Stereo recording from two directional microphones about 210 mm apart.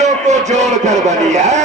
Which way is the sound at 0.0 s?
35° right (ahead or behind).